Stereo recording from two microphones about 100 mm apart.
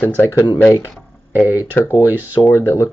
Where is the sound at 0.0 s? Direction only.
20° left (ahead or behind).